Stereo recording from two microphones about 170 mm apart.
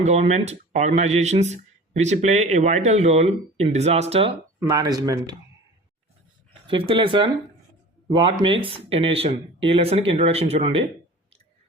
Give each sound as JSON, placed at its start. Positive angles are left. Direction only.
{"t": 0.0, "sound": "speech", "side_deg": -40}
{"t": 4.7, "sound": "speech", "side_deg": -20}
{"t": 6.7, "sound": "speech", "side_deg": -30}